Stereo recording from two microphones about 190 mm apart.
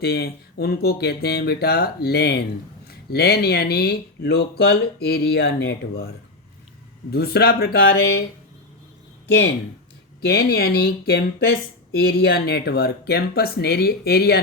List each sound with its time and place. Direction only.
0.0 s speech: 55° left (ahead or behind)
7.1 s speech: 55° left (ahead or behind)
10.2 s speech: 55° left (ahead or behind)